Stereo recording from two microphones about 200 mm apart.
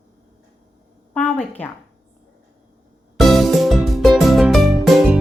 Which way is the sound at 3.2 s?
Centre (ahead or behind).